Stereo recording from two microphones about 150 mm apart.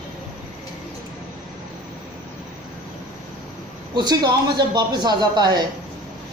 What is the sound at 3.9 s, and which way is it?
A man's voice, 25° right (ahead or behind).